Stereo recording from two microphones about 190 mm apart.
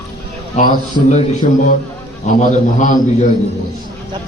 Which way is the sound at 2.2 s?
40° left (ahead or behind).